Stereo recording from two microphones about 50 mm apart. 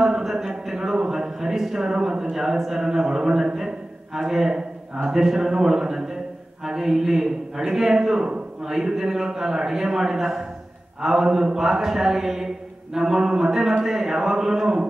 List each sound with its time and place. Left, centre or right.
0.0 s a man's voice: centre